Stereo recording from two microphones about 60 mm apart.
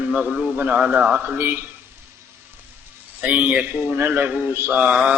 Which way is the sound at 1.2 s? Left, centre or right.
Right.